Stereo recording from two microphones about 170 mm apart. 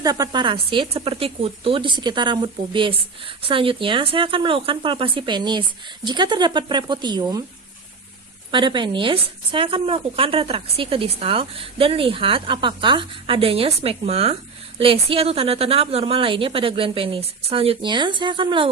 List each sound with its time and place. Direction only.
0.0 s speech: 20° right (ahead or behind)
8.4 s speech: 30° right (ahead or behind)